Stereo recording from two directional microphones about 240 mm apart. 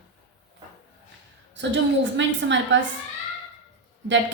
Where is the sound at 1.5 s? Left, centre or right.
Right.